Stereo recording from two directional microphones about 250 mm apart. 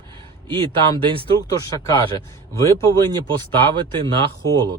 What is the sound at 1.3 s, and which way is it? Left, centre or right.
Speech, centre.